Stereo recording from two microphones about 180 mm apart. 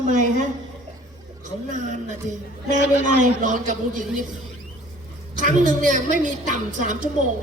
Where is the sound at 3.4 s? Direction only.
45° right (ahead or behind).